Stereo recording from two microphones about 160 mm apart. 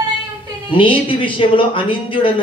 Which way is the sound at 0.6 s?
30° left (ahead or behind).